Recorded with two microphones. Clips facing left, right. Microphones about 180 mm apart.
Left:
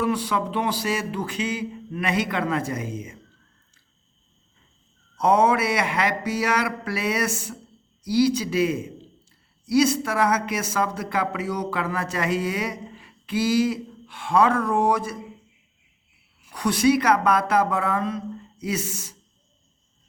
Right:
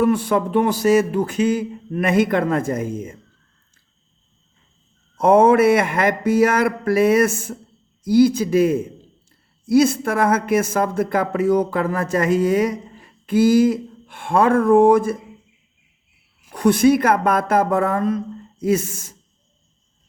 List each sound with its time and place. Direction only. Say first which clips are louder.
0.0 s speech: right 7 dB; 50° right (ahead or behind)
5.1 s speech: right 6 dB; 50° right (ahead or behind)
16.5 s speech: right 6 dB; 50° right (ahead or behind)